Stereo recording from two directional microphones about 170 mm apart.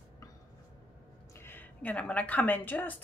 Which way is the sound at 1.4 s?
10° left (ahead or behind).